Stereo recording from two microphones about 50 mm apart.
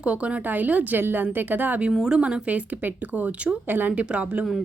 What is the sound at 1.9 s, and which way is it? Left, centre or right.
A woman's voice, centre.